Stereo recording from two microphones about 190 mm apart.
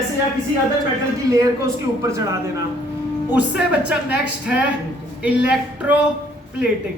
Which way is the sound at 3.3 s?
5° right (ahead or behind).